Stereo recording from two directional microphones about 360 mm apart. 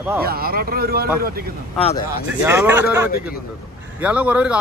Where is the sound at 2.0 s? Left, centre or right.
Centre.